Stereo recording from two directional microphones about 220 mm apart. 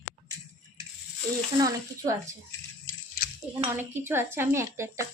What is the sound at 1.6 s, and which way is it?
Speech, 15° right (ahead or behind).